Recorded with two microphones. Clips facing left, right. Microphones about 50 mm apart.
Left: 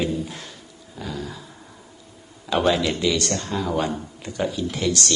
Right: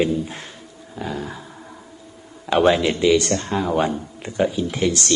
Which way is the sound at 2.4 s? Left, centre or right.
Right.